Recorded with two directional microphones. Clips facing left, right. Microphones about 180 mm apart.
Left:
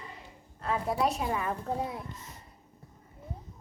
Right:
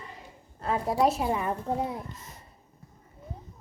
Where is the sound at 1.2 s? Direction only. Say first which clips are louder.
Right 3 dB; 20° right (ahead or behind).